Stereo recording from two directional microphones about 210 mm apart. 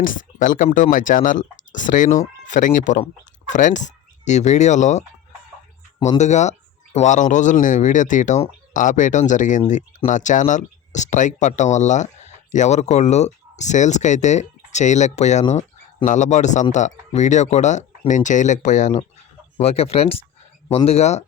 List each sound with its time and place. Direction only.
0.0 s speech: 40° left (ahead or behind)